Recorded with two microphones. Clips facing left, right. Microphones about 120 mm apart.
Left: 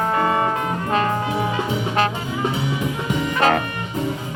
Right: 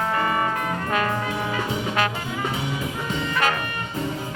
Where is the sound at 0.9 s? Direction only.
30° left (ahead or behind).